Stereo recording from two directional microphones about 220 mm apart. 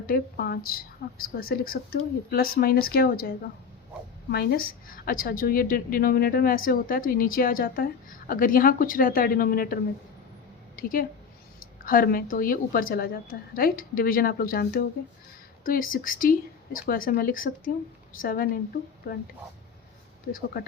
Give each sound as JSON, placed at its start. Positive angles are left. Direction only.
{"t": 0.1, "sound": "a woman's voice", "side_deg": 45}
{"t": 10.8, "sound": "a woman's voice", "side_deg": 40}
{"t": 20.3, "sound": "a woman's voice", "side_deg": 50}